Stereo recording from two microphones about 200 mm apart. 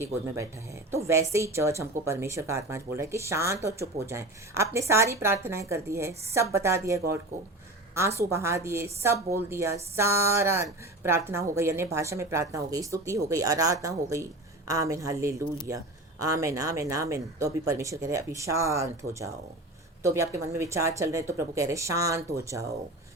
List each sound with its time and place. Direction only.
1.0 s a woman's voice: 15° right (ahead or behind)